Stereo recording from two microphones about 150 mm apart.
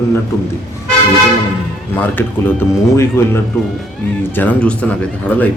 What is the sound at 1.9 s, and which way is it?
Speech, 15° left (ahead or behind).